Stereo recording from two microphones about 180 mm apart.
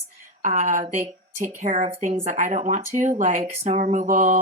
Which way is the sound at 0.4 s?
45° right (ahead or behind).